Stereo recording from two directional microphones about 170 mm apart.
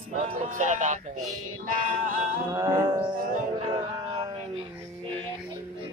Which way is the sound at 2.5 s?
20° right (ahead or behind).